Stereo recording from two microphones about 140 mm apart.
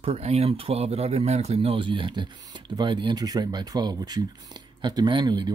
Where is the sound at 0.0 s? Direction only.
45° right (ahead or behind).